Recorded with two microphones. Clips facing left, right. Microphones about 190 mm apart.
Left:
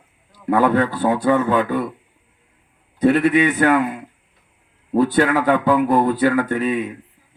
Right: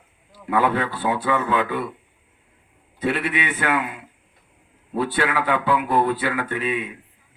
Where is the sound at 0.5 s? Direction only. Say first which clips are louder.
Left 5 dB; 40° left (ahead or behind).